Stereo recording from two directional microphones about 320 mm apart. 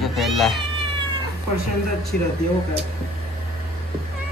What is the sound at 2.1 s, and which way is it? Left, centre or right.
Speech, left.